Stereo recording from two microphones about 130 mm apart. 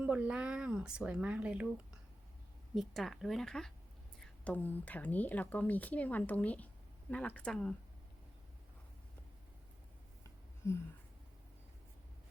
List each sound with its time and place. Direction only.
0.0 s speech: 10° right (ahead or behind)
2.7 s speech: centre (ahead or behind)
10.6 s a sound: 20° left (ahead or behind)